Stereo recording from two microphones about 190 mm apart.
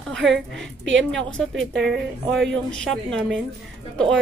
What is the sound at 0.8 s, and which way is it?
Speech, 75° right (ahead or behind).